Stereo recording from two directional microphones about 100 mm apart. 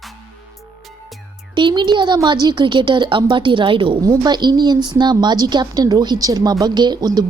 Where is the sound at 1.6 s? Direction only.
50° right (ahead or behind).